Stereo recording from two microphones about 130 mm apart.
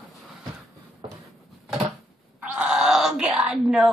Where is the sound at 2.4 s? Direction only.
10° right (ahead or behind).